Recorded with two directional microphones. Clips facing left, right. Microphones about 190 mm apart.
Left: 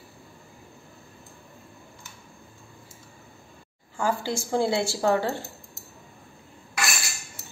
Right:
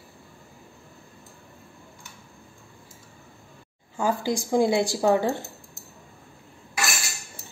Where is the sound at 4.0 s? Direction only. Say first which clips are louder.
Right 2 dB; 20° right (ahead or behind).